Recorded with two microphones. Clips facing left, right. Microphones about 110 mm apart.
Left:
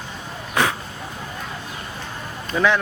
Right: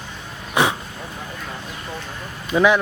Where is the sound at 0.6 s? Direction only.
15° right (ahead or behind).